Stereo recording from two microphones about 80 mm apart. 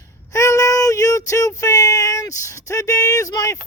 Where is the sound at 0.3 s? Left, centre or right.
Left.